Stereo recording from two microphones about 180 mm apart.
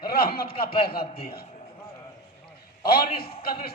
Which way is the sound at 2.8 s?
55° left (ahead or behind).